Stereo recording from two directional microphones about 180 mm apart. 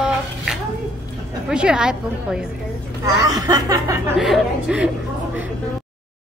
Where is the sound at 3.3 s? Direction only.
20° right (ahead or behind).